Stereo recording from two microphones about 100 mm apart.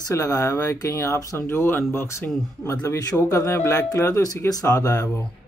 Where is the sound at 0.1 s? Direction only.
30° left (ahead or behind).